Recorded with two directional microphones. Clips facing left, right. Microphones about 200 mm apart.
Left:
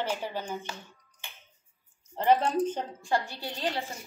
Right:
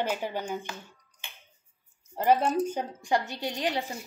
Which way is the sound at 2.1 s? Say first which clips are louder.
Right 1 dB; 5° right (ahead or behind).